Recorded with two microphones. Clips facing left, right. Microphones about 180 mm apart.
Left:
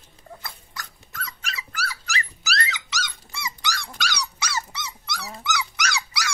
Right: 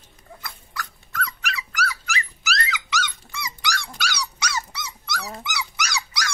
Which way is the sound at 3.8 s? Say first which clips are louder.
Even; 5° right (ahead or behind).